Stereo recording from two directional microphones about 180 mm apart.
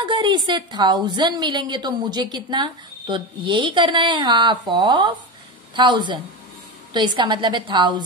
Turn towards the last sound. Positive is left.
turn(degrees=-25)  # may be behind; listen again after turning